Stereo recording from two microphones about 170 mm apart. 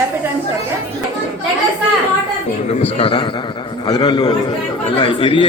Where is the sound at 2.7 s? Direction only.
35° left (ahead or behind).